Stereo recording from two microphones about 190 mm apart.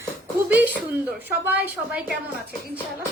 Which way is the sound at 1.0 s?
10° right (ahead or behind).